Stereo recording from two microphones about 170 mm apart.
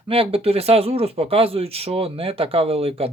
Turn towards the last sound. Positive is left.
turn(degrees=-35)  # may be behind; listen again after turning